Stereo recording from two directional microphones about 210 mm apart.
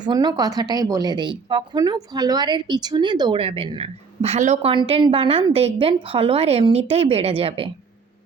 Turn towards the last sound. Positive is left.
turn(degrees=-25)  # may be behind; listen again after turning